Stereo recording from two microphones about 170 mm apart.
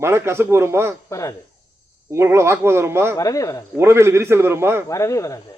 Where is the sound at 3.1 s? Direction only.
20° left (ahead or behind).